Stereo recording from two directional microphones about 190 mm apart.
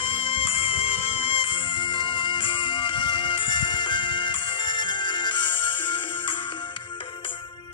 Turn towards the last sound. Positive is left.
turn(degrees=25)  # may be behind; listen again after turning